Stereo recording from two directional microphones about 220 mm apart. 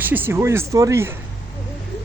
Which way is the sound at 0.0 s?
10° right (ahead or behind).